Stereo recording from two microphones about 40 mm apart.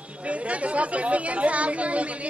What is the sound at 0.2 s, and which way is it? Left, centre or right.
A man's voice, right.